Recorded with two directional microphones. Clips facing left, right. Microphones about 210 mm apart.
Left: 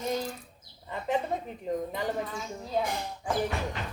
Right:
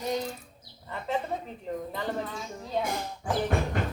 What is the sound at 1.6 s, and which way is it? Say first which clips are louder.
Speech: left 3 dB; 15° left (ahead or behind).